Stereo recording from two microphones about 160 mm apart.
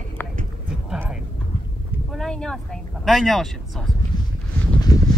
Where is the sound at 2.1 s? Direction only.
5° left (ahead or behind).